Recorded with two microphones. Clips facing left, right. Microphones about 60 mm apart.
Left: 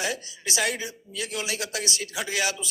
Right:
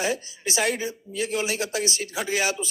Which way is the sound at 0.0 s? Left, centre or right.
Right.